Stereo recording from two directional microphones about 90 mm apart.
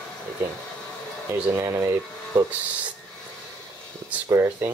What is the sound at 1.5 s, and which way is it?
Speech, 35° right (ahead or behind).